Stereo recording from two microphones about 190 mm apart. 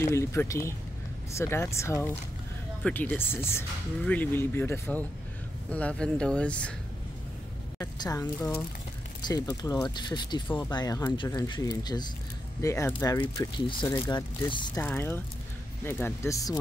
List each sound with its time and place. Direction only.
0.0 s speech: 15° left (ahead or behind)
7.8 s speech: 20° left (ahead or behind)